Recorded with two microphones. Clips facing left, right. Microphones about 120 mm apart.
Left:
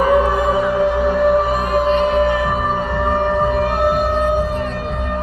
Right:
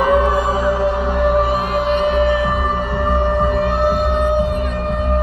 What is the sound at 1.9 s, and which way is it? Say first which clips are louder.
Music: even; 40° left (ahead or behind).